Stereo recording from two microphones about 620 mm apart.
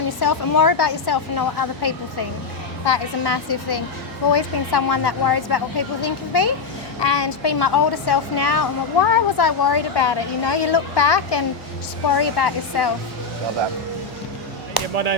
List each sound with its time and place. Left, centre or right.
0.2 s a woman's voice: left